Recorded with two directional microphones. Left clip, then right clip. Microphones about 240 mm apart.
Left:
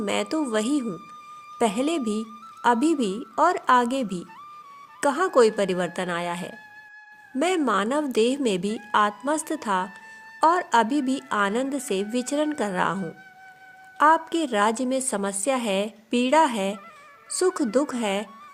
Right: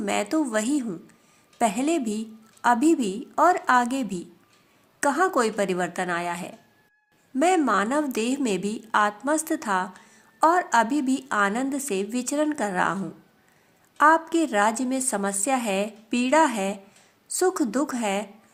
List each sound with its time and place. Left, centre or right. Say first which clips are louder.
0.0 s a woman's voice: right 1 dB; left
14.0 s a woman's voice: right 1 dB; left